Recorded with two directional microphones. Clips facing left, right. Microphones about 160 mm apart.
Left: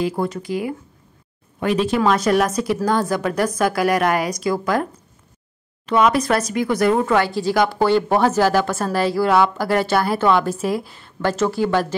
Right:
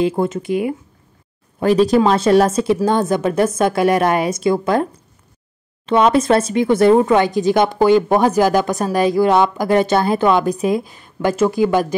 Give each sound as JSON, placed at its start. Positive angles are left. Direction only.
{"t": 0.0, "sound": "speech", "side_deg": -20}
{"t": 1.6, "sound": "speech", "side_deg": -35}
{"t": 5.9, "sound": "speech", "side_deg": -25}